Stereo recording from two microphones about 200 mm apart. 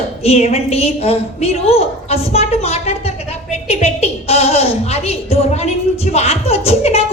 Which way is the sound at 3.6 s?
30° left (ahead or behind).